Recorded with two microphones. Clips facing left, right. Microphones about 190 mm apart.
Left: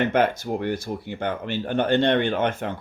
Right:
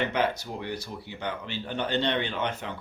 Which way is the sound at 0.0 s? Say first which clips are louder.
Left 6 dB; 50° left (ahead or behind).